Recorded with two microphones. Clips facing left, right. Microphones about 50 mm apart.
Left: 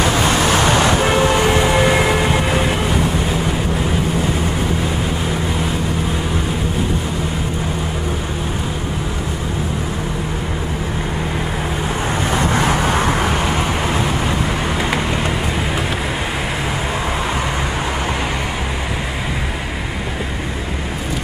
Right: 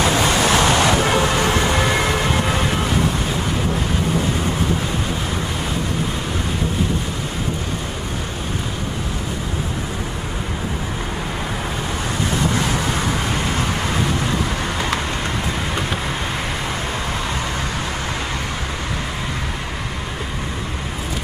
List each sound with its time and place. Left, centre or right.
0.3 s vehicle: centre
12.3 s vehicle: left